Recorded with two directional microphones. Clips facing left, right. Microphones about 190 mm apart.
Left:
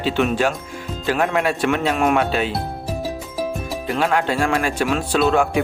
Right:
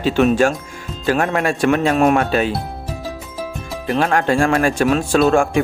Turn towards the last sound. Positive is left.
turn(degrees=-45)  # may be behind; listen again after turning